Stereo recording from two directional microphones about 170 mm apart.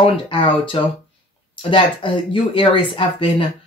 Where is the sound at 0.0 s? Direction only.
30° left (ahead or behind).